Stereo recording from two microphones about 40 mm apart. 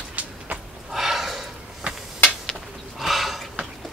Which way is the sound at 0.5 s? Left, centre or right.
Centre.